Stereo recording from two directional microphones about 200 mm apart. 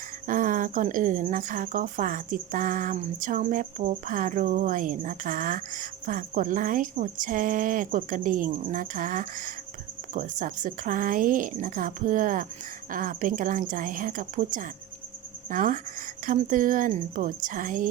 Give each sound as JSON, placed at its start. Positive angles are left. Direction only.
{"t": 0.3, "sound": "a woman's voice", "side_deg": -40}